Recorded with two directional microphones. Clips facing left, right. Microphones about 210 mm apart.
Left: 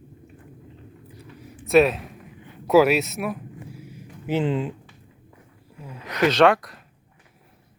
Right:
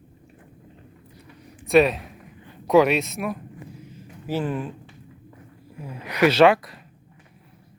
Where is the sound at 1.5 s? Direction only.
Centre (ahead or behind); by 4.7 s 20° left (ahead or behind).